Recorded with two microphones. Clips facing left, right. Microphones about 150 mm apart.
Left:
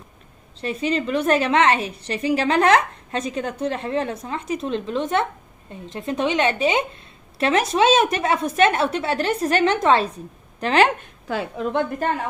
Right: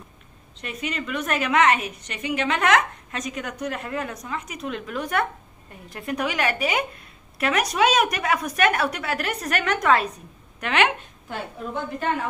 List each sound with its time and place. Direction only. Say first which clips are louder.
0.6 s a woman's voice: left 8 dB; 30° left (ahead or behind)
11.2 s a woman's voice: left 7 dB; 90° left